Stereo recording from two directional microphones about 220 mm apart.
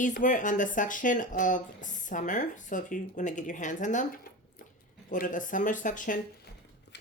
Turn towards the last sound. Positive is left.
turn(degrees=40)  # may be behind; listen again after turning